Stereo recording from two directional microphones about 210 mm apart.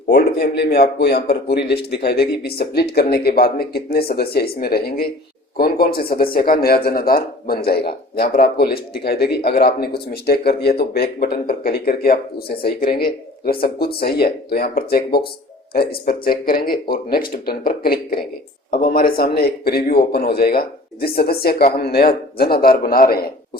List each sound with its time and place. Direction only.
0.1 s speech: 50° left (ahead or behind)